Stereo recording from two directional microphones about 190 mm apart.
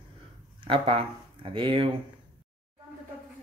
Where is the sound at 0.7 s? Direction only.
30° right (ahead or behind).